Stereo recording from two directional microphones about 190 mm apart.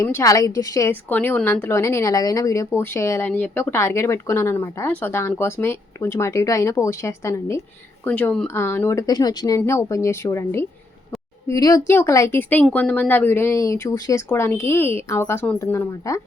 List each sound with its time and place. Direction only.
0.0 s a woman's voice: 15° left (ahead or behind)